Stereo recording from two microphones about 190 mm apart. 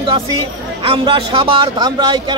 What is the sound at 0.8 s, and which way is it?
Speech, 30° right (ahead or behind).